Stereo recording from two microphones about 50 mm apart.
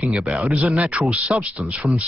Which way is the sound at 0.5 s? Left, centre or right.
Right.